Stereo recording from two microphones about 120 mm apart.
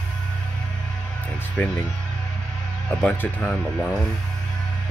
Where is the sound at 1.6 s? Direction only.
15° left (ahead or behind).